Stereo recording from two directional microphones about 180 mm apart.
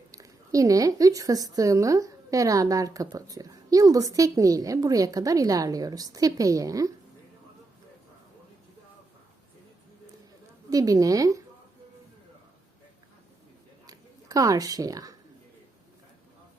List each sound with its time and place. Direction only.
0.1 s a woman's voice: 20° right (ahead or behind)
10.7 s a woman's voice: 20° right (ahead or behind)
13.8 s a sound: 20° right (ahead or behind)